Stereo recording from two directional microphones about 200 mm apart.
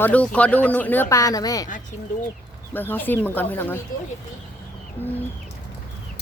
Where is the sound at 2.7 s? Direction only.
10° left (ahead or behind).